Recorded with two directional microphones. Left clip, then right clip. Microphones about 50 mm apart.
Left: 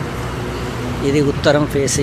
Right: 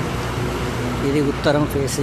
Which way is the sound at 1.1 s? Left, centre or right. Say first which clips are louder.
Left 5 dB; left.